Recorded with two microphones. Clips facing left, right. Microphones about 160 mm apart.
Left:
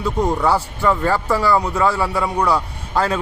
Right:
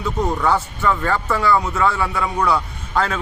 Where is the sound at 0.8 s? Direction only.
35° left (ahead or behind).